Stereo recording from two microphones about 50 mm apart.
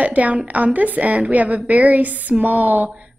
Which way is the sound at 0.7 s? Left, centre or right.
Right.